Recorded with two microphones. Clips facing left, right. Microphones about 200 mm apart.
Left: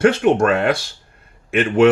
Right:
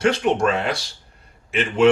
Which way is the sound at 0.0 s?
60° left (ahead or behind).